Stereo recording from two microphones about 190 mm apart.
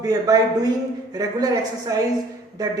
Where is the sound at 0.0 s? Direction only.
20° right (ahead or behind).